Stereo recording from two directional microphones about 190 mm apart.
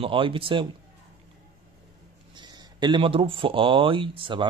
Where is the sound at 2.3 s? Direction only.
20° right (ahead or behind).